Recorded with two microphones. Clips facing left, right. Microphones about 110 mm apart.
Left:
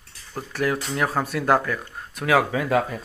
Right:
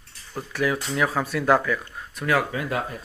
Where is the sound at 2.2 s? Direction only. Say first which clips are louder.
Left 3 dB; 90° left.